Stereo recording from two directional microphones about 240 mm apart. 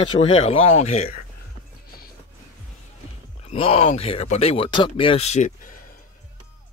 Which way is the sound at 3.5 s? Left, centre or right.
Left.